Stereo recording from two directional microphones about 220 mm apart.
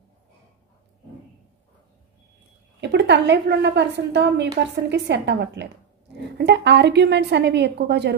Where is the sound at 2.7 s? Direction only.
50° right (ahead or behind).